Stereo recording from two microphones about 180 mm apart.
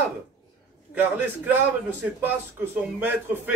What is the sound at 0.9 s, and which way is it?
A man's voice, 10° right (ahead or behind).